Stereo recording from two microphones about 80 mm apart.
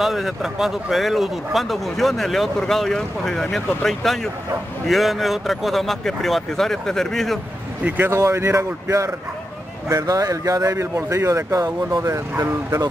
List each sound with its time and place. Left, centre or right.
0.0 s speech: centre
8.0 s a man's voice: right
9.8 s a man's voice: right